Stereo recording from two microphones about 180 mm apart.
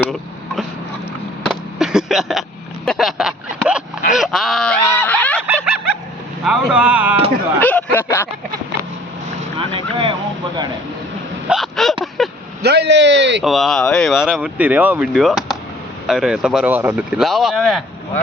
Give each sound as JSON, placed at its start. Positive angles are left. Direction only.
{"t": 1.5, "sound": "a sound", "side_deg": 0}
{"t": 4.2, "sound": "honk", "side_deg": 0}
{"t": 4.9, "sound": "a sound", "side_deg": 10}
{"t": 5.5, "sound": "snicker", "side_deg": -5}
{"t": 6.4, "sound": "speech", "side_deg": -5}
{"t": 7.6, "sound": "a sound", "side_deg": 10}
{"t": 9.6, "sound": "vehicle", "side_deg": -30}
{"t": 11.4, "sound": "hiccup", "side_deg": 0}
{"t": 12.2, "sound": "vehicle", "side_deg": 0}
{"t": 12.6, "sound": "speech", "side_deg": -70}
{"t": 13.4, "sound": "speech", "side_deg": 0}